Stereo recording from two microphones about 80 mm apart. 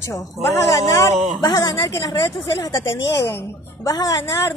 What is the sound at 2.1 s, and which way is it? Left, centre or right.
A woman's voice, left.